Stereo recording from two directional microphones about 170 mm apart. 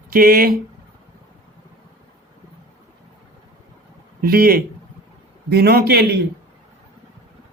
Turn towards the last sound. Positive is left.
turn(degrees=-70)  # may be behind; listen again after turning